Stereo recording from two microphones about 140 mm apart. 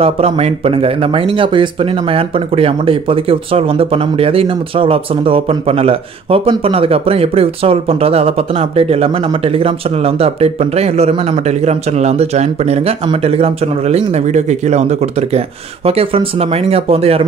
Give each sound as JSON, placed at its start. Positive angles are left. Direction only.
{"t": 0.0, "sound": "speech", "side_deg": -45}